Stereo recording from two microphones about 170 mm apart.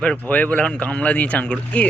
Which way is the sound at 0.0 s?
10° left (ahead or behind).